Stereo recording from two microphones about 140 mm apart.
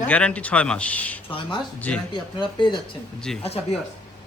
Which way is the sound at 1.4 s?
35° left (ahead or behind).